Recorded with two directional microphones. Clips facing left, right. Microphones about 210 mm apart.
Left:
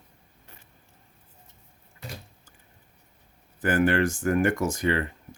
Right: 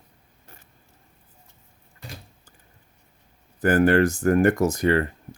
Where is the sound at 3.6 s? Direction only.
40° right (ahead or behind).